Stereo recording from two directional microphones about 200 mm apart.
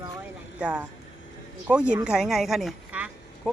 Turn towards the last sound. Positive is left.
turn(degrees=5)  # may be behind; listen again after turning